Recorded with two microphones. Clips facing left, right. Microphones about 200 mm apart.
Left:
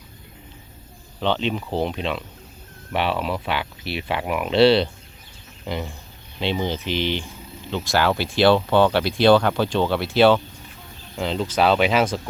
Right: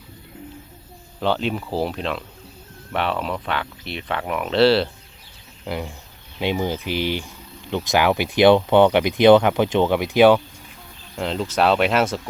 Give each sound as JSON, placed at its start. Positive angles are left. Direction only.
{"t": 1.2, "sound": "speech", "side_deg": -5}
{"t": 11.2, "sound": "speech", "side_deg": 0}